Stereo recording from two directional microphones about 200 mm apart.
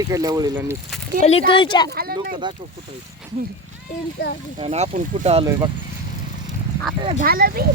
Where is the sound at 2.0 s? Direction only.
50° right (ahead or behind).